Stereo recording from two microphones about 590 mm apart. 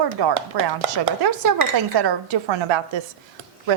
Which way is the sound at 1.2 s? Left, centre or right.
Right.